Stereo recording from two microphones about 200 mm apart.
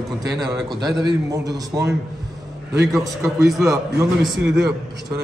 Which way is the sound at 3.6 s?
15° right (ahead or behind).